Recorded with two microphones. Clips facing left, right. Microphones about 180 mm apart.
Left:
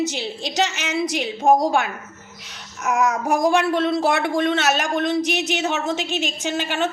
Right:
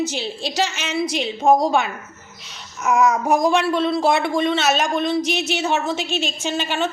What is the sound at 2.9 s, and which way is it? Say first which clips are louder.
Child singing: right 3 dB; 65° left (ahead or behind).